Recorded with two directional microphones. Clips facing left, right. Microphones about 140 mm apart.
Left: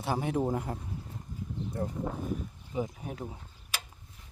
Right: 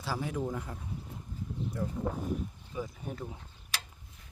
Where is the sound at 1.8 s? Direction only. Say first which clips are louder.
Left 2 dB; 50° left (ahead or behind).